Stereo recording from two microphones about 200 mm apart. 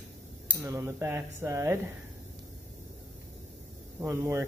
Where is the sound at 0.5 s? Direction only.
15° right (ahead or behind).